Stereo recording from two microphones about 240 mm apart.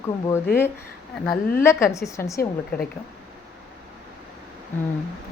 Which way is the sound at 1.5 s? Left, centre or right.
Centre.